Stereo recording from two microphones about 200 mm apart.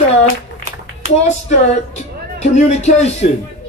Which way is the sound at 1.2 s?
35° left (ahead or behind).